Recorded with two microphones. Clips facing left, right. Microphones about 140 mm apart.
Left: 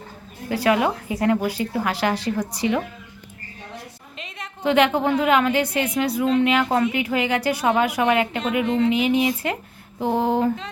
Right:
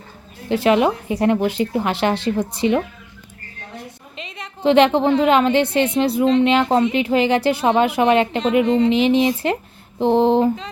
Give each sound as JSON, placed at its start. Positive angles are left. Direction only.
{"t": 0.4, "sound": "a woman's voice", "side_deg": -25}
{"t": 4.2, "sound": "a sound", "side_deg": 0}
{"t": 4.6, "sound": "a woman's voice", "side_deg": -30}
{"t": 8.6, "sound": "speech", "side_deg": 0}
{"t": 8.9, "sound": "a woman's voice", "side_deg": -30}
{"t": 10.4, "sound": "speech", "side_deg": 0}